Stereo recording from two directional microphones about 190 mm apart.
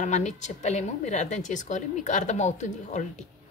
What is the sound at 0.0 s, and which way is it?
Speech, 40° left (ahead or behind).